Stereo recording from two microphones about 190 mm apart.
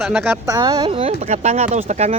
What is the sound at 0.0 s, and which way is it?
Speech, 5° right (ahead or behind).